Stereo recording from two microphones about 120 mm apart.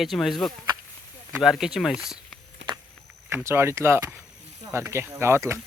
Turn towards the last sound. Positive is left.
turn(degrees=-20)  # may be behind; listen again after turning